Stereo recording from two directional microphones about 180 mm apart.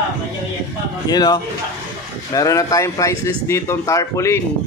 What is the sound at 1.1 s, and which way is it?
Speech, 20° left (ahead or behind).